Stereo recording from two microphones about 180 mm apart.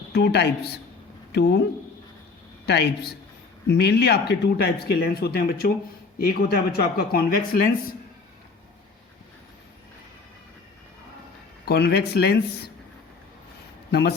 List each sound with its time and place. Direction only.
0.1 s a woman's voice: 65° left (ahead or behind)
2.6 s speech: 65° left (ahead or behind); by 7.9 s 50° left (ahead or behind)
11.6 s speech: 65° left (ahead or behind)
13.9 s speech: 65° left (ahead or behind)